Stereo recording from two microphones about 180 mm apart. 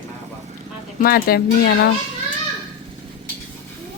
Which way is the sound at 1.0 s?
55° left (ahead or behind).